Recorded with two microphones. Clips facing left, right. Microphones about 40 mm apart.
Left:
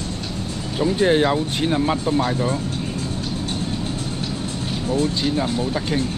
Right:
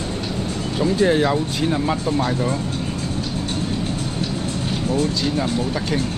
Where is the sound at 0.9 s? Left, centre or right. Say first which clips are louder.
Even; left.